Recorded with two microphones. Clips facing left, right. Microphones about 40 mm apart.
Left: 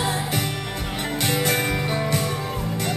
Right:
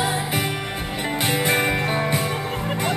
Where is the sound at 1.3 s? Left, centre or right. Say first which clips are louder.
Right 3 dB; centre.